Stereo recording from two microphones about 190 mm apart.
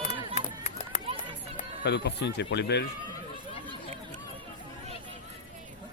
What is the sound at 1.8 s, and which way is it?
Speech, 65° left (ahead or behind).